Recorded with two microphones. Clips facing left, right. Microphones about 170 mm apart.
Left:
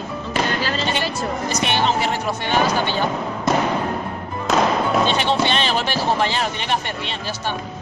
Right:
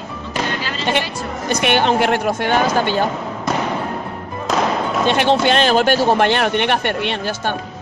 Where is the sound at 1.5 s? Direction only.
60° right (ahead or behind).